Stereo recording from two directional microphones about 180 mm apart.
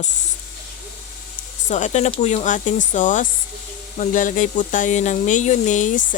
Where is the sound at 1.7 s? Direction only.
40° left (ahead or behind).